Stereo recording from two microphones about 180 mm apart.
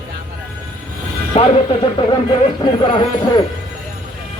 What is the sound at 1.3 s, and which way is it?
A woman's voice, 35° left (ahead or behind).